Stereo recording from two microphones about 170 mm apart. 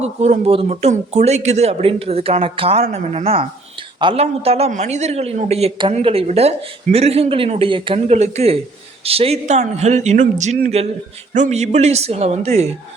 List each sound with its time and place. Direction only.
0.0 s speech: 40° right (ahead or behind)